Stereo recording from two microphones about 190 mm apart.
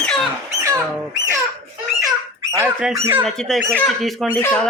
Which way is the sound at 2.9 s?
15° right (ahead or behind).